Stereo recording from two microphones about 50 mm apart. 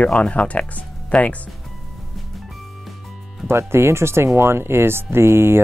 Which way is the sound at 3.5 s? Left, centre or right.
Right.